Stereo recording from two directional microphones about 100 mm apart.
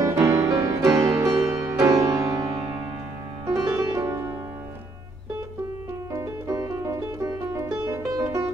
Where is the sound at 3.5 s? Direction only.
30° right (ahead or behind).